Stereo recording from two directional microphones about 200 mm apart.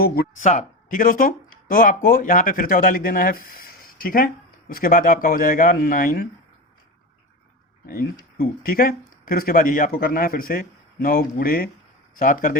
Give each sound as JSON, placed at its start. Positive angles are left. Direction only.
{"t": 0.3, "sound": "speech", "side_deg": 35}
{"t": 7.9, "sound": "speech", "side_deg": 45}